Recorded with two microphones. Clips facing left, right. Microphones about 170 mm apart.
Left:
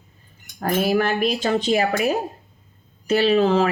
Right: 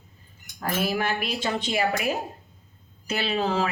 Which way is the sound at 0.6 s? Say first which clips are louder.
Left 6 dB; 45° left (ahead or behind).